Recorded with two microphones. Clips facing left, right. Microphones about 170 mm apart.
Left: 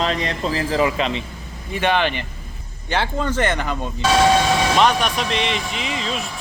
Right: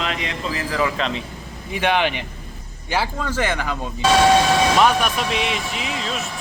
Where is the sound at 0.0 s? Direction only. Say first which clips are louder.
Left 4 dB; 35° left (ahead or behind).